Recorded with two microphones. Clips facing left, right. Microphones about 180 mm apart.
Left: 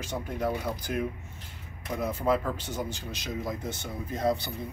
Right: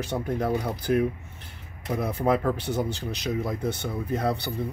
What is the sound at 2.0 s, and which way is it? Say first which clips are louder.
Speech: right 3 dB; 65° right (ahead or behind).